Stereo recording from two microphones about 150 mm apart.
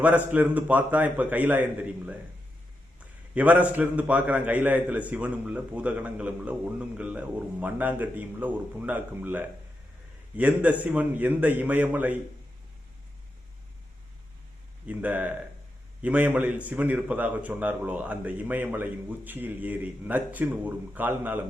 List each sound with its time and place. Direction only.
0.0 s a man's voice: 10° right (ahead or behind)
14.8 s a man's voice: 10° right (ahead or behind)